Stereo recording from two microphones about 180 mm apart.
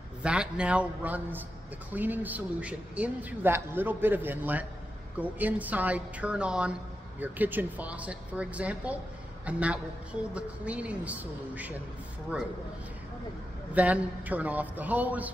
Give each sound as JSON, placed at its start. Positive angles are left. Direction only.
{"t": 0.2, "sound": "speech", "side_deg": -5}
{"t": 13.7, "sound": "speech", "side_deg": -10}